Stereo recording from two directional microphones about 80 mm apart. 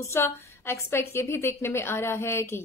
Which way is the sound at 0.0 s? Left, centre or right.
Left.